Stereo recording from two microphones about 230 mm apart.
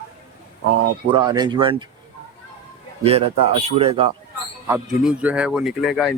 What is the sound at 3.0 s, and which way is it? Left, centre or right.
Speech, right.